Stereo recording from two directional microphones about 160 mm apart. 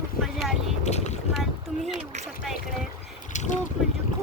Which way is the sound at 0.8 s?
45° left (ahead or behind).